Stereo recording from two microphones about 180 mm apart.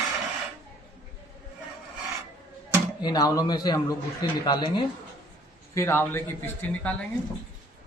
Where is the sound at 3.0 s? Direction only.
20° left (ahead or behind).